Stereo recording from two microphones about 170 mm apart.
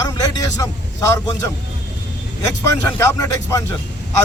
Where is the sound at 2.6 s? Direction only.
20° left (ahead or behind).